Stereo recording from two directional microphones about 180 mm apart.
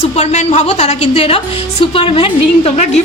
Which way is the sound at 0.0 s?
40° left (ahead or behind).